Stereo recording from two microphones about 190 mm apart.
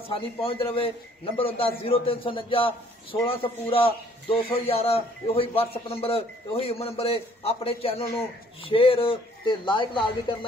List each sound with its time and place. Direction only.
0.1 s a man's voice: 30° left (ahead or behind)